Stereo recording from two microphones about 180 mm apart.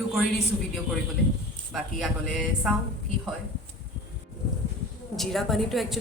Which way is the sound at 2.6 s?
Centre (ahead or behind).